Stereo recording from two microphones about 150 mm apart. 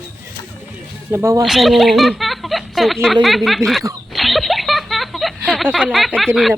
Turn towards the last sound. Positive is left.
turn(degrees=0)  # may be behind; listen again after turning